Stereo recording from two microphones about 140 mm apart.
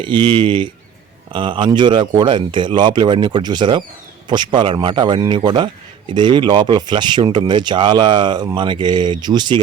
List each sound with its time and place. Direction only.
0.0 s speech: 35° right (ahead or behind)